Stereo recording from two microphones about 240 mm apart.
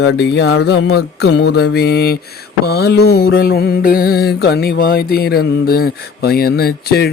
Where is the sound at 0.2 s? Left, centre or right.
Left.